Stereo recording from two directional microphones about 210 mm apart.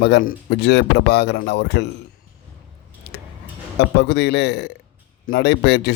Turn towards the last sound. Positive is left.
turn(degrees=55)  # may be behind; listen again after turning